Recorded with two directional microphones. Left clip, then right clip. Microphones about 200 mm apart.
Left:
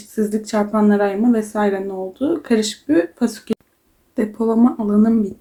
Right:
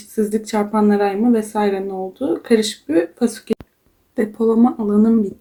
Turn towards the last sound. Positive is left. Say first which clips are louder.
# right 1 dB
turn(degrees=0)  # may be behind; listen again after turning